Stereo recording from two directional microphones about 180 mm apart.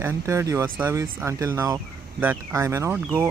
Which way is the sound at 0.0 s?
15° right (ahead or behind).